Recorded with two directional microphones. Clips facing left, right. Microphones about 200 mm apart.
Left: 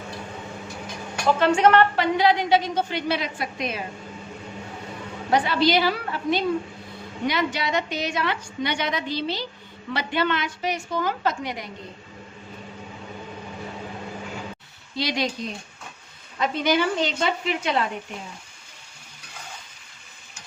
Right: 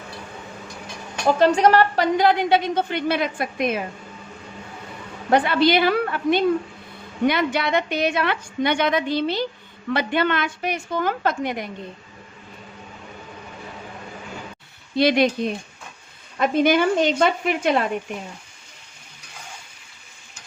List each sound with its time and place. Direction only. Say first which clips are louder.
1.4 s a woman's voice: right 2 dB; 35° right (ahead or behind)
5.3 s a woman's voice: right 3 dB; 55° right (ahead or behind)
14.9 s a woman's voice: right 9 dB; 55° right (ahead or behind)